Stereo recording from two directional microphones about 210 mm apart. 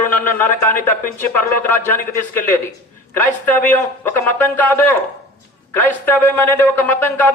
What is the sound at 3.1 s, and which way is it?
A man's voice, 10° left (ahead or behind).